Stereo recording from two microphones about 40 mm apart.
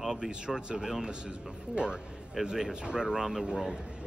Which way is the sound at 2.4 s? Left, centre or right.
Centre.